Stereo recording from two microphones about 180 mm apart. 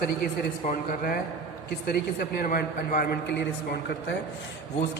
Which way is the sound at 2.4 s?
50° left (ahead or behind).